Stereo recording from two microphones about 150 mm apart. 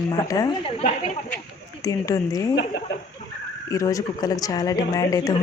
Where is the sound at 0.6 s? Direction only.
50° left (ahead or behind).